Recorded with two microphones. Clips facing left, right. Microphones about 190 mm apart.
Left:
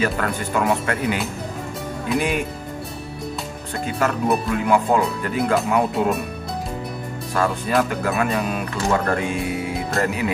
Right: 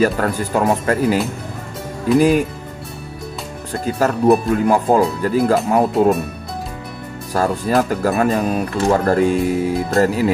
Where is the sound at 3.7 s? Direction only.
35° right (ahead or behind).